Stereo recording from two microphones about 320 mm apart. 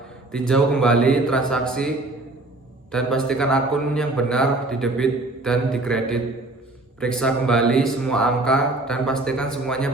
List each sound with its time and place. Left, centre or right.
0.3 s a man's voice: centre
2.9 s a man's voice: centre